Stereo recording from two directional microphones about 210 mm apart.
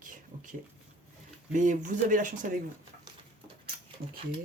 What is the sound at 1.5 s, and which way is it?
Speech, 35° right (ahead or behind).